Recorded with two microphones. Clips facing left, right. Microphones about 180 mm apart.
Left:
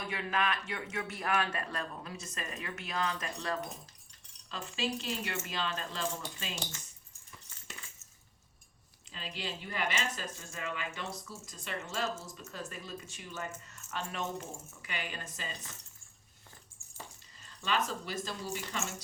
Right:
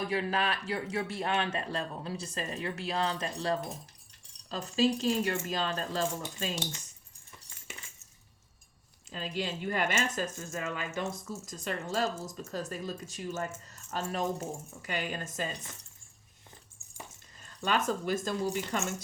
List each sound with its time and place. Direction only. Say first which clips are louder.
0.1 s speech: right 3 dB; 35° right (ahead or behind)
9.1 s speech: right 6 dB; 45° right (ahead or behind)
17.4 s speech: right 4 dB; 50° right (ahead or behind)